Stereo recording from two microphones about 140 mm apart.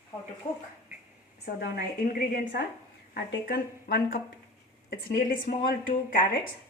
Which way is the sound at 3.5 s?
90° left.